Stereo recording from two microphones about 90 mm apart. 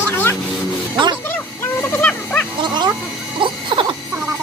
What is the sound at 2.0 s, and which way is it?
Wild animals, 15° left (ahead or behind).